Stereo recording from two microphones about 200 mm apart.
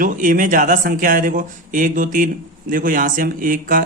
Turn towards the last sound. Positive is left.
turn(degrees=-45)  # may be behind; listen again after turning